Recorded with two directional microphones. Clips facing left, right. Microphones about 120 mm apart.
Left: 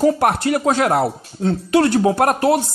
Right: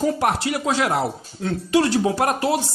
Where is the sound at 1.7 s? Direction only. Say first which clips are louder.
Left 3 dB; 55° left (ahead or behind).